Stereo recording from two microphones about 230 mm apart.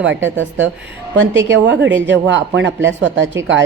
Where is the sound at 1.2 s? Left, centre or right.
Right.